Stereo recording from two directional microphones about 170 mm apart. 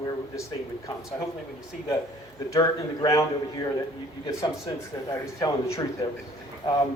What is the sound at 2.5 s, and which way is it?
A man's voice, 20° left (ahead or behind).